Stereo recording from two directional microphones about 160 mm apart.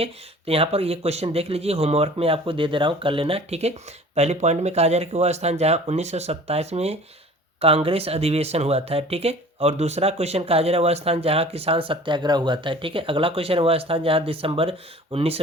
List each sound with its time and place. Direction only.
0.0 s speech: 35° right (ahead or behind)